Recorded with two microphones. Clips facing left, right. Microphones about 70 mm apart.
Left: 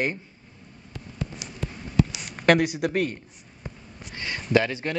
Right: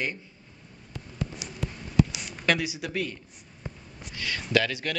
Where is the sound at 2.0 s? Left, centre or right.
Left.